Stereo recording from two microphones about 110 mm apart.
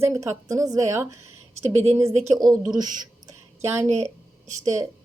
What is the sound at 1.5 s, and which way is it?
Speech, 75° right (ahead or behind).